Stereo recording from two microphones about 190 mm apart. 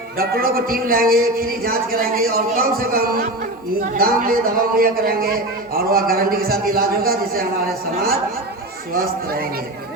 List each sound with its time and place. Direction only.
0.2 s a man's voice: 50° right (ahead or behind)
8.9 s a man's voice: 50° right (ahead or behind)